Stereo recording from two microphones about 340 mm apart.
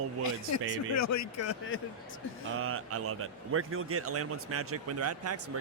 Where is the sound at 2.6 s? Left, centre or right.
Right.